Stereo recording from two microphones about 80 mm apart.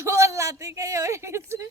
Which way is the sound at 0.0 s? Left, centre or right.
Right.